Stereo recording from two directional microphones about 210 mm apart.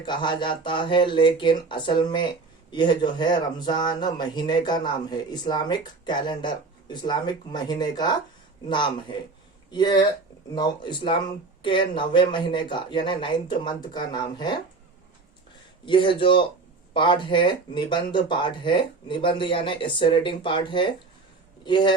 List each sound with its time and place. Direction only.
0.0 s speech: 20° left (ahead or behind)
15.9 s a man's voice: 25° left (ahead or behind)